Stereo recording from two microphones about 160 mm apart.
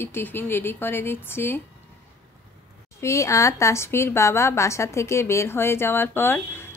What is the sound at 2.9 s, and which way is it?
A woman's voice, 20° left (ahead or behind).